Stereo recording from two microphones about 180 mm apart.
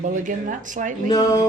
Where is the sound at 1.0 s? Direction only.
20° left (ahead or behind).